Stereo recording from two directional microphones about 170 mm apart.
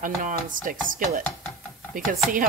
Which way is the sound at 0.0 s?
50° right (ahead or behind).